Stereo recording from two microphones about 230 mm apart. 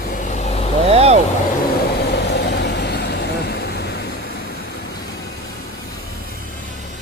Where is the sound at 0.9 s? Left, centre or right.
Right.